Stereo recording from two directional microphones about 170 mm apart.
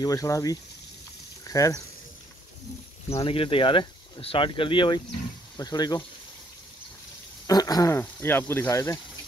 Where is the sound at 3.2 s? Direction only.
30° left (ahead or behind).